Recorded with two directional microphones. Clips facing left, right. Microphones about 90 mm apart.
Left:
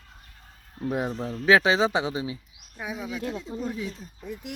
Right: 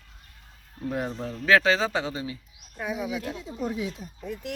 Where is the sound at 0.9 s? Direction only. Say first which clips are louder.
Left 2 dB; 10° left (ahead or behind).